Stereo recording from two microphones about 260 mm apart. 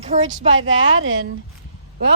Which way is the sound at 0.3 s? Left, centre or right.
Right.